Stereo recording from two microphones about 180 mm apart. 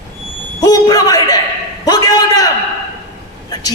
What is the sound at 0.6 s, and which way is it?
Speech, 20° left (ahead or behind).